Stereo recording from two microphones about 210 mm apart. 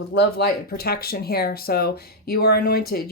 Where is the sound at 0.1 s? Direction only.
55° left (ahead or behind).